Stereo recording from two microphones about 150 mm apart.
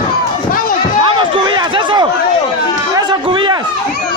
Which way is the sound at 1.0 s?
35° right (ahead or behind).